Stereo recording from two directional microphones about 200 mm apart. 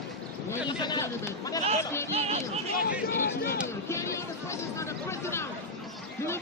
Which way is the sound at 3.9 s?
15° left (ahead or behind).